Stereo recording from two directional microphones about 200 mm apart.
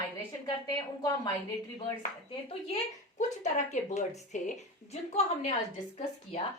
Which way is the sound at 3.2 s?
35° left (ahead or behind).